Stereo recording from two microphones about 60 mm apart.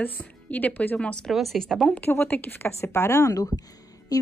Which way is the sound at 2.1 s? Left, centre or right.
Left.